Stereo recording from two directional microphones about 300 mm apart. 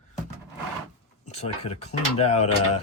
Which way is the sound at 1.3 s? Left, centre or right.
Left.